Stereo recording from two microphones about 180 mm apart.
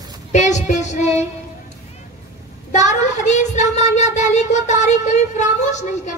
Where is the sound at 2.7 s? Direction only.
40° left (ahead or behind).